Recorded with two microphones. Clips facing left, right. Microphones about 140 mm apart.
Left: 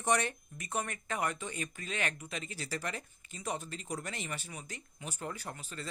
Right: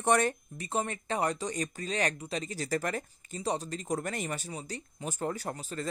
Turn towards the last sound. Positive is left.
turn(degrees=-40)  # may be behind; listen again after turning